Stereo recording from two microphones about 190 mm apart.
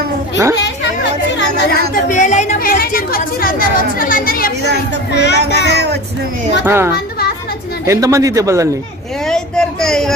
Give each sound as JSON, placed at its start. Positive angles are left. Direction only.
{"t": 2.0, "sound": "chatter", "side_deg": 40}
{"t": 5.1, "sound": "child singing", "side_deg": 65}
{"t": 5.7, "sound": "music", "side_deg": -60}
{"t": 6.6, "sound": "a man's voice", "side_deg": -10}
{"t": 9.3, "sound": "a sound", "side_deg": 5}